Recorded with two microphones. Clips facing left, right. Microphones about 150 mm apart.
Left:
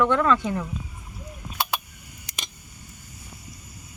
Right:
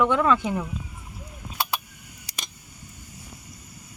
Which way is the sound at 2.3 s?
35° right (ahead or behind).